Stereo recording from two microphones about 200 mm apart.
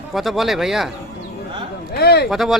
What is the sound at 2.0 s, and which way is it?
Speech, 55° left (ahead or behind).